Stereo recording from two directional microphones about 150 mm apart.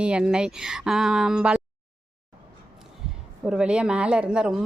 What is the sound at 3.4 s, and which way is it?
Speech, 5° right (ahead or behind).